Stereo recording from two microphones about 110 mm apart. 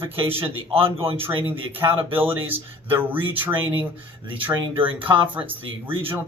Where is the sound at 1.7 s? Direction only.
20° right (ahead or behind).